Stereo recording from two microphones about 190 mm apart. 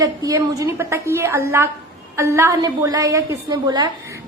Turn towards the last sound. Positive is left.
turn(degrees=-20)  # may be behind; listen again after turning